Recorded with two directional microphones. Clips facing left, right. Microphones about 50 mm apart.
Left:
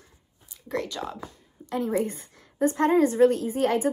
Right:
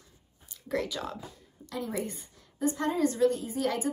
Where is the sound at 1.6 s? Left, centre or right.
Left.